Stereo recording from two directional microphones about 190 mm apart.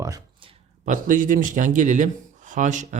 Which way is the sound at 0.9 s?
45° right (ahead or behind).